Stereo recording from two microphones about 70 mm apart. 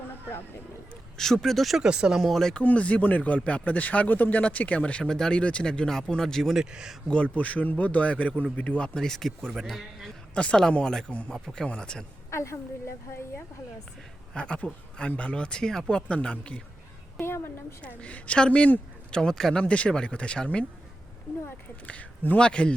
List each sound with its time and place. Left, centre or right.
0.1 s a sound: left
1.1 s speech: centre
2.3 s speech: centre
2.6 s speech: centre
6.6 s speech: centre
7.1 s speech: centre
10.3 s speech: centre
12.3 s a woman's voice: left
14.3 s speech: centre
16.0 s speech: centre
17.2 s a woman's voice: left
17.8 s speech: centre
21.8 s speech: left